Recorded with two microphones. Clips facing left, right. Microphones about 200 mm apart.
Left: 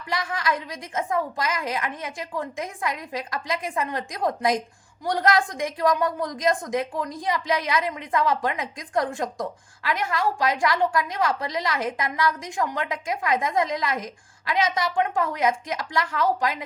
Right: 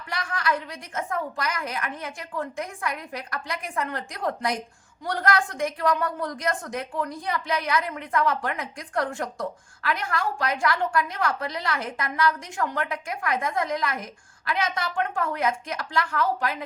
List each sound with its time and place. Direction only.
0.3 s a woman's voice: 20° left (ahead or behind)